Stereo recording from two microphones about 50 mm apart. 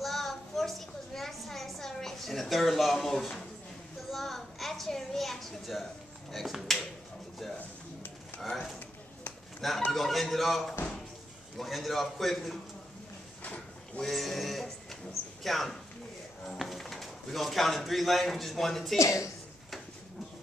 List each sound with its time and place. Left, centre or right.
0.0 s a sound: centre
6.3 s a man's voice: centre
8.4 s a man's voice: centre
13.4 s a sound: left
14.0 s a man's voice: centre
18.9 s a woman's voice: left